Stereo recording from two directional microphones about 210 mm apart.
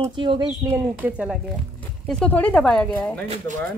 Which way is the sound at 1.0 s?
5° right (ahead or behind).